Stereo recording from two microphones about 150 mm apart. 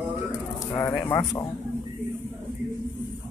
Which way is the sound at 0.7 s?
15° left (ahead or behind).